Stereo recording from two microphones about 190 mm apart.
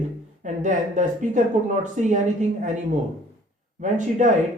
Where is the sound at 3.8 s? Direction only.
40° right (ahead or behind).